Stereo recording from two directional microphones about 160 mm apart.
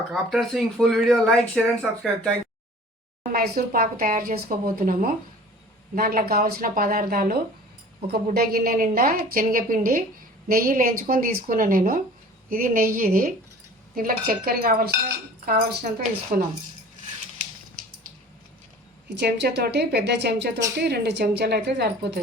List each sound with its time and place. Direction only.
0.1 s speech: centre (ahead or behind)
3.3 s a woman's voice: 70° right (ahead or behind)
16.3 s speech: 70° right (ahead or behind)
19.2 s a woman's voice: 85° right